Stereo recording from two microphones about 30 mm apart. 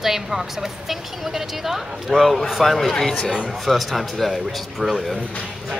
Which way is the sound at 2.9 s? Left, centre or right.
Centre.